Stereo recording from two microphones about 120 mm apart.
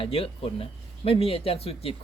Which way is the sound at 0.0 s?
50° left (ahead or behind).